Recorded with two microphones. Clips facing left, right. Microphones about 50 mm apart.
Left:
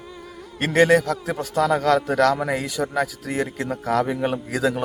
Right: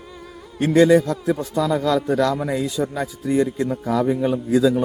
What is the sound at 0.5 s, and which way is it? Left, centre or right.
A man's voice, left.